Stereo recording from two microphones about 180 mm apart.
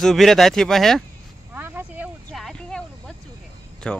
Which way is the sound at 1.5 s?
10° right (ahead or behind).